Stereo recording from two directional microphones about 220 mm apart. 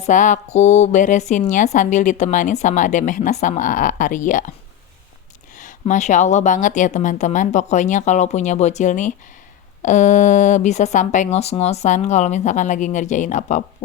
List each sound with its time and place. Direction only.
0.0 s a woman's voice: 35° left (ahead or behind)
5.5 s a woman's voice: 35° left (ahead or behind)